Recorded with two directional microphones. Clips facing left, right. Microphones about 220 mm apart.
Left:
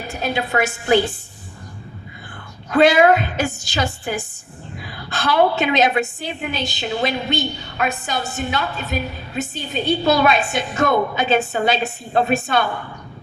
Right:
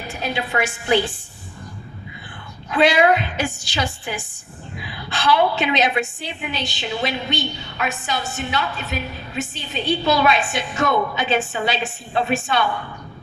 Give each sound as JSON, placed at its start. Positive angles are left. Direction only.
{"t": 0.1, "sound": "a woman's voice", "side_deg": 40}
{"t": 2.6, "sound": "a woman's voice", "side_deg": 40}